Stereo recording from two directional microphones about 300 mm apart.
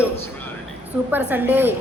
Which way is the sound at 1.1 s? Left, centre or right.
Centre.